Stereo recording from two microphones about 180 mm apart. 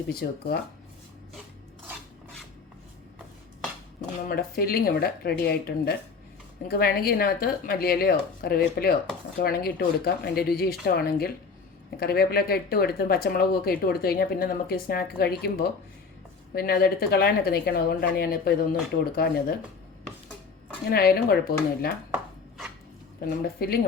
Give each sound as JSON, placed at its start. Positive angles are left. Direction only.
{"t": 0.1, "sound": "speech", "side_deg": 60}
{"t": 4.3, "sound": "speech", "side_deg": 55}
{"t": 20.9, "sound": "speech", "side_deg": 60}
{"t": 22.1, "sound": "chopping", "side_deg": -5}
{"t": 23.2, "sound": "speech", "side_deg": 55}